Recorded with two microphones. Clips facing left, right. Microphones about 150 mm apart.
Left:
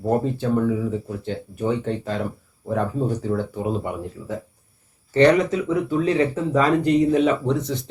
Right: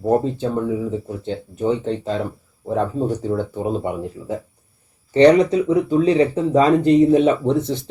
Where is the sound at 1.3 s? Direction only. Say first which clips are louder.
Right 3 dB; 25° right (ahead or behind).